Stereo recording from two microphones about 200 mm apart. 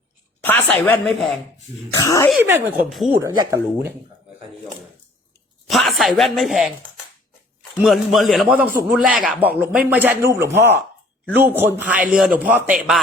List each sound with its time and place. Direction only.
0.4 s a woman's voice: 10° left (ahead or behind)
2.0 s a woman's voice: 15° left (ahead or behind)
2.4 s a man's voice: 10° right (ahead or behind)
5.6 s speech: centre (ahead or behind)
7.8 s a man's voice: centre (ahead or behind)